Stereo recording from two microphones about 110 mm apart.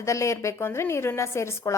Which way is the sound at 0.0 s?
25° left (ahead or behind).